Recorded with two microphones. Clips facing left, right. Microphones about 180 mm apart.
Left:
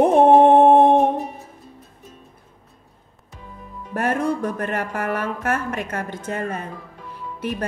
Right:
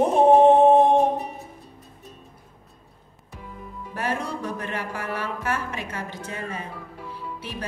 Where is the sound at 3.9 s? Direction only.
50° left (ahead or behind).